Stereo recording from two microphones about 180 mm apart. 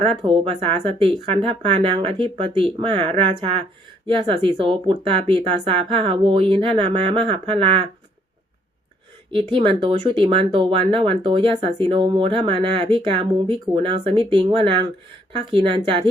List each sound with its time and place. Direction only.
0.0 s speech: 30° right (ahead or behind)
9.3 s speech: 30° right (ahead or behind)